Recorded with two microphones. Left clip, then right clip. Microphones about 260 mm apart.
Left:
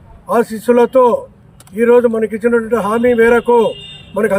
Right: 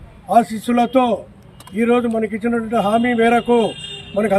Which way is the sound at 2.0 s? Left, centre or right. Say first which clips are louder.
Left 7 dB; centre.